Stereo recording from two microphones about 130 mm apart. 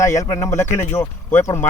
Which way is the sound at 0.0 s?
20° left (ahead or behind).